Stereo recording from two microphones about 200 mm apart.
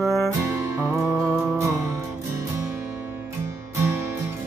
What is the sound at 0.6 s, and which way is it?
Music, 15° right (ahead or behind).